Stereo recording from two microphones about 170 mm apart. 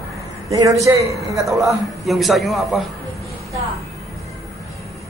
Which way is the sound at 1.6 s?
Centre (ahead or behind).